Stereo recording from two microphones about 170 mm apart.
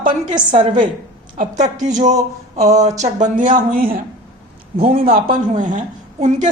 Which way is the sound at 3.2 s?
50° right (ahead or behind).